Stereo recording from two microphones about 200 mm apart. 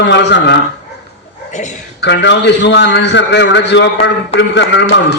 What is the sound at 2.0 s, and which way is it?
A man's voice, 60° left (ahead or behind).